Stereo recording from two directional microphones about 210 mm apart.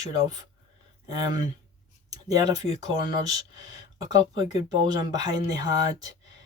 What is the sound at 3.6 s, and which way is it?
Speech, 20° right (ahead or behind).